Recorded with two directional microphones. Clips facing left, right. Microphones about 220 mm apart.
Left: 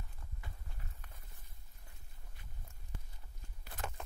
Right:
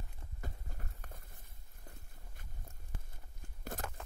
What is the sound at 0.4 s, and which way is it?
Run, 45° right (ahead or behind).